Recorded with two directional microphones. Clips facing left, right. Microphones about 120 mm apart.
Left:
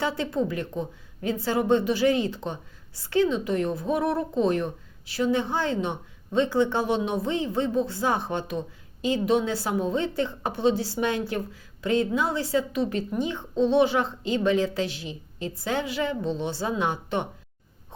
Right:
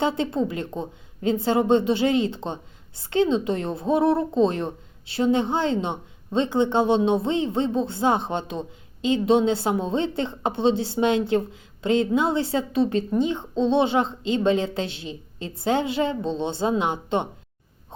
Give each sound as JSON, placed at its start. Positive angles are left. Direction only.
{"t": 0.0, "sound": "a woman's voice", "side_deg": -25}